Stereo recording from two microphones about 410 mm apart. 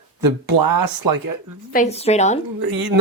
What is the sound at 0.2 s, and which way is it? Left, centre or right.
Speech, right.